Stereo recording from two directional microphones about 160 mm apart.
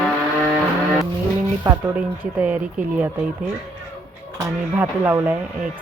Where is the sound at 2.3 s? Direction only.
10° right (ahead or behind).